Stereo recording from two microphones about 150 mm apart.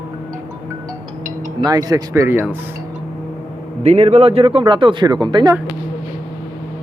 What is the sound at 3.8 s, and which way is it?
Speech, 45° right (ahead or behind).